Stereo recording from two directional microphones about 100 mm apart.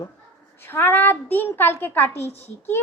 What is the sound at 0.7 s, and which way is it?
Speech, 20° left (ahead or behind).